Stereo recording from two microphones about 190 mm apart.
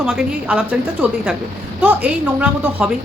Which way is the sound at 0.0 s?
5° right (ahead or behind).